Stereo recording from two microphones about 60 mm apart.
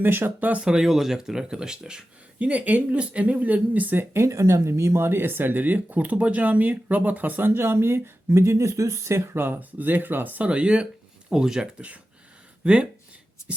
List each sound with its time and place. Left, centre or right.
0.0 s speech: right
0.6 s speech: centre
2.4 s speech: right
4.1 s speech: right; by 12.9 s centre